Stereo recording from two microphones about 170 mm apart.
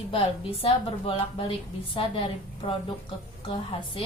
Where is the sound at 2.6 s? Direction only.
35° left (ahead or behind).